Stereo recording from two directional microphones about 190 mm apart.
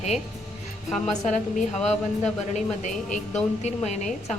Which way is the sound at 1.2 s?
40° left (ahead or behind).